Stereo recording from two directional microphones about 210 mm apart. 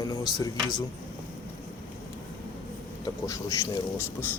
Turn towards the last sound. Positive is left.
turn(degrees=10)  # may be behind; listen again after turning